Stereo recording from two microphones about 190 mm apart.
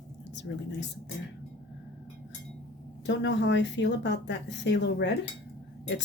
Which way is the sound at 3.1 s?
70° left (ahead or behind).